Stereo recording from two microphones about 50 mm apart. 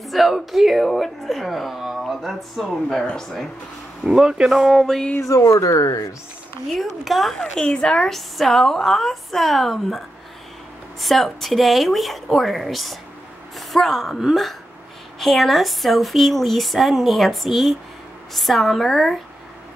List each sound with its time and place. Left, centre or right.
0.0 s speech: centre
3.2 s speech: centre
4.0 s speech: centre
4.5 s speech: centre
5.2 s speech: left
6.7 s speech: centre
7.3 s speech: centre
8.1 s speech: centre